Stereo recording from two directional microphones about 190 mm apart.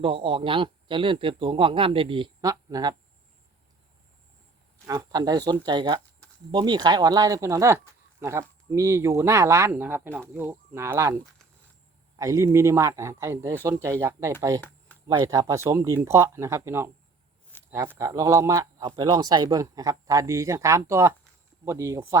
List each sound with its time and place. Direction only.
0.0 s speech: 25° right (ahead or behind)
4.9 s speech: 20° right (ahead or behind)
17.5 s a sound: 10° left (ahead or behind)
17.8 s speech: 20° right (ahead or behind)